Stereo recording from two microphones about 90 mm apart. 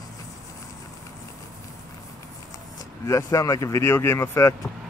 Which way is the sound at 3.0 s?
35° left (ahead or behind).